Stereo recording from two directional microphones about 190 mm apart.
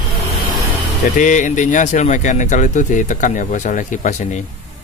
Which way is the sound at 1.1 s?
40° left (ahead or behind).